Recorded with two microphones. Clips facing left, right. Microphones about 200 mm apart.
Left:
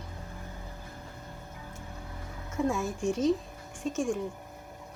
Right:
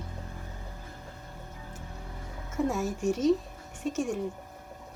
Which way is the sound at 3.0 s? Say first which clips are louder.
Right 2 dB; 40° right (ahead or behind).